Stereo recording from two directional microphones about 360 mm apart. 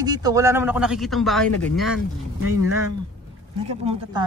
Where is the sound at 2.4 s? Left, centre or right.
Right.